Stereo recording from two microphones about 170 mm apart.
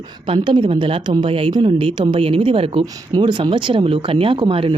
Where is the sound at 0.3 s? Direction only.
30° right (ahead or behind).